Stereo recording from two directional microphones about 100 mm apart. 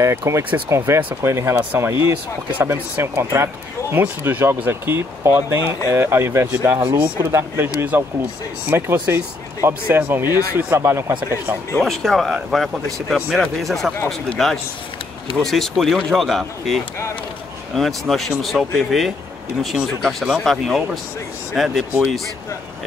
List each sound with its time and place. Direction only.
0.0 s speech: 30° right (ahead or behind)
11.7 s speech: 5° left (ahead or behind)